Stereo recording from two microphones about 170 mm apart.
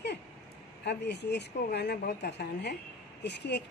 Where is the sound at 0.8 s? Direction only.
85° left.